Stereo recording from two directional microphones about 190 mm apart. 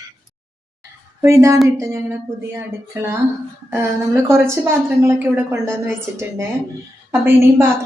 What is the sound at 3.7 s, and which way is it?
A woman's voice, 15° right (ahead or behind).